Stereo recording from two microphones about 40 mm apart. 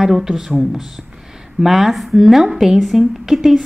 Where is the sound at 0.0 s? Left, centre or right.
Centre.